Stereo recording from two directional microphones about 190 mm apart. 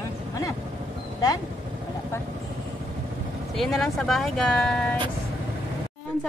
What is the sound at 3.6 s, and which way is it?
Speech, centre (ahead or behind).